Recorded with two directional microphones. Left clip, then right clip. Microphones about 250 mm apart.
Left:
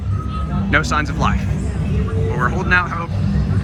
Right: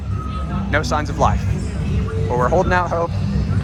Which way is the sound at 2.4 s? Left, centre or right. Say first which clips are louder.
Right 5 dB; right.